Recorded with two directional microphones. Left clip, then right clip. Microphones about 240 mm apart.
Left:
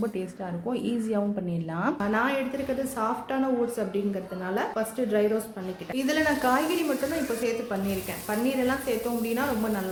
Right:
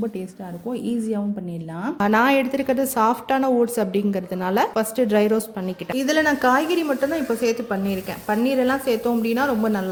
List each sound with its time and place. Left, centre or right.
0.7 s a woman's voice: right
6.0 s a woman's voice: right